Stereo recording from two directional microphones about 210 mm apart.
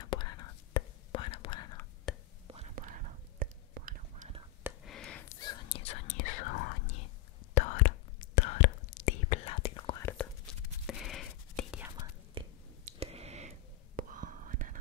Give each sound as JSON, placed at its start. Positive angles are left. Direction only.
{"t": 0.0, "sound": "whispering", "side_deg": 20}
{"t": 2.7, "sound": "whispering", "side_deg": -40}
{"t": 4.6, "sound": "a sound", "side_deg": 0}
{"t": 5.3, "sound": "whispering", "side_deg": 20}
{"t": 6.2, "sound": "whispering", "side_deg": 40}
{"t": 10.0, "sound": "whispering", "side_deg": 5}
{"t": 12.4, "sound": "a sound", "side_deg": -30}
{"t": 13.9, "sound": "whispering", "side_deg": -40}